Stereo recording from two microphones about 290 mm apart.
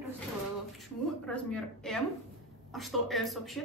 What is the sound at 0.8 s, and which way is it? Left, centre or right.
Speech, centre.